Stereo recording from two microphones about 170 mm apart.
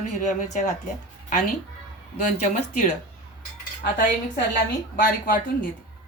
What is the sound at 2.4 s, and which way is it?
Speech, 45° left (ahead or behind).